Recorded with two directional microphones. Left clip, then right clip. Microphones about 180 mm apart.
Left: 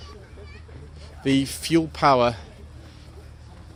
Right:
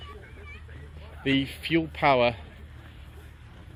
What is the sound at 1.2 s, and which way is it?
Speech, 30° left (ahead or behind).